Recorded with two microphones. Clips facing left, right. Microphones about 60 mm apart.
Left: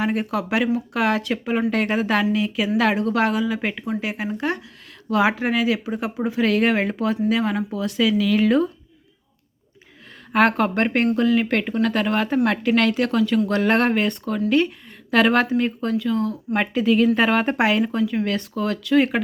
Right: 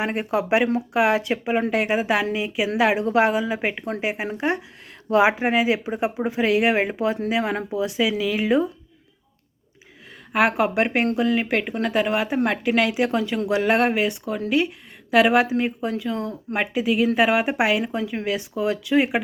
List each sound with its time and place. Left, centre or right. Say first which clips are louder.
0.0 s speech: even; right
10.3 s speech: left 1 dB; centre
13.5 s speech: left 1 dB; centre
16.1 s speech: left 5 dB; right
16.6 s speech: left 3 dB; centre
17.9 s speech: left 3 dB; centre